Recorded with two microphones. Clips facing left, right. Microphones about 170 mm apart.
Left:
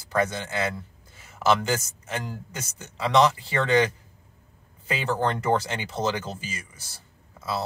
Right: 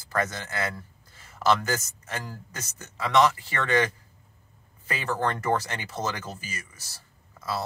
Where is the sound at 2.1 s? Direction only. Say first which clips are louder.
Left 4 dB; 15° left (ahead or behind).